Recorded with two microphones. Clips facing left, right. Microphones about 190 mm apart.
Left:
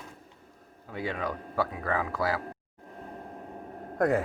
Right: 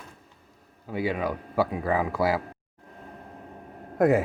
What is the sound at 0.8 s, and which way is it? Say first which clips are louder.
Speech: right 5 dB; 10° right (ahead or behind).